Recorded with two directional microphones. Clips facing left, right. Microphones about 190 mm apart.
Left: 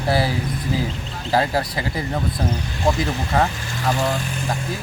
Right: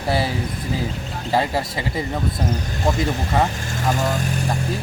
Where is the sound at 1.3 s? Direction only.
Centre (ahead or behind).